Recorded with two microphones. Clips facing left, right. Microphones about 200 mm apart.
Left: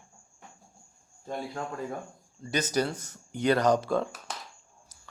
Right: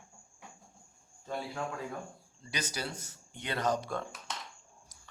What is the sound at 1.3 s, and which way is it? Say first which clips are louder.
Speech: left 2 dB; 40° left (ahead or behind).